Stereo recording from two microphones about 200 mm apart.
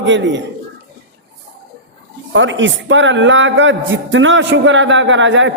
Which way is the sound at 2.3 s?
70° right (ahead or behind).